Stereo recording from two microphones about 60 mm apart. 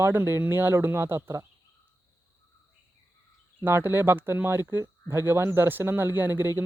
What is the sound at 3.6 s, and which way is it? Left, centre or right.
Speech, right.